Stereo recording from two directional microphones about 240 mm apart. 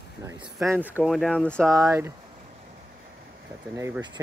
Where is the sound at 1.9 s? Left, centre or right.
Centre.